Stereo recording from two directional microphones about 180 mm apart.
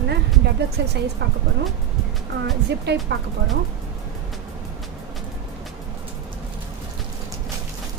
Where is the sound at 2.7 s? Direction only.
70° right (ahead or behind).